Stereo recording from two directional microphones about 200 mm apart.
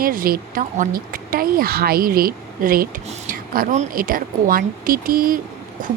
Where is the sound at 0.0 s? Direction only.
45° right (ahead or behind).